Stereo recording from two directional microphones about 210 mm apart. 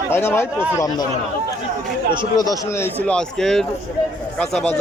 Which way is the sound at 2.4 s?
15° left (ahead or behind).